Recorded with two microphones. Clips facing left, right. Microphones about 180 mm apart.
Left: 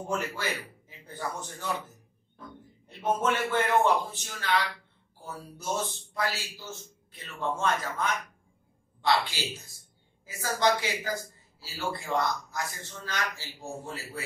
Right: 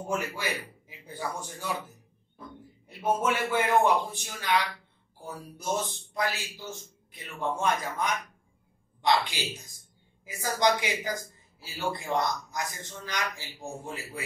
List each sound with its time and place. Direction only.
0.1 s a man's voice: 10° right (ahead or behind)